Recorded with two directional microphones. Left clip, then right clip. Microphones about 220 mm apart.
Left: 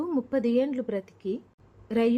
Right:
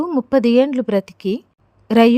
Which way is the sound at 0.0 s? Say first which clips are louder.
Right 11 dB; 35° right (ahead or behind).